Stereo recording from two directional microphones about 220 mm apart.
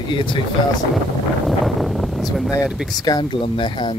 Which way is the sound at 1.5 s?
Centre (ahead or behind).